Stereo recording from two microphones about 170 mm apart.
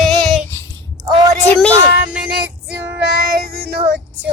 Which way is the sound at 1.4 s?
10° left (ahead or behind).